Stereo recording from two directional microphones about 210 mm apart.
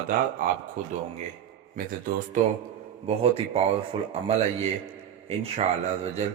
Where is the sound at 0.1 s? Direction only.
45° right (ahead or behind); by 4.1 s 25° right (ahead or behind).